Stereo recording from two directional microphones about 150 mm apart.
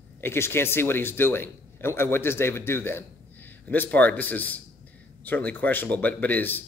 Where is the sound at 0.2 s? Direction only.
15° left (ahead or behind).